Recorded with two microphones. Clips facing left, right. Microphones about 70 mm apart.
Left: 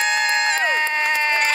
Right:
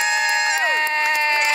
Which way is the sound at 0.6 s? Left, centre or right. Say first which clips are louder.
Even; centre.